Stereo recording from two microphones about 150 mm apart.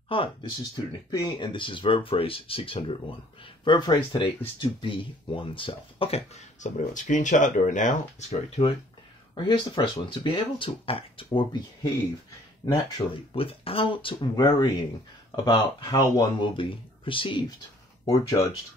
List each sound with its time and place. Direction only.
0.1 s speech: 35° left (ahead or behind)
9.3 s speech: 30° left (ahead or behind)
12.6 s speech: 25° left (ahead or behind)